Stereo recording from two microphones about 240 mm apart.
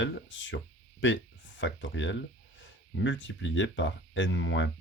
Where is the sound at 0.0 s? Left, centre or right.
Left.